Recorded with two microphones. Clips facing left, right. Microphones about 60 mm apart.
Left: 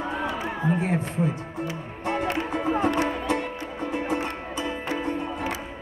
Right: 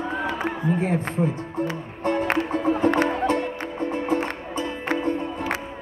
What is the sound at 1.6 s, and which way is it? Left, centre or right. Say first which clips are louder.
Music: right 8 dB; right.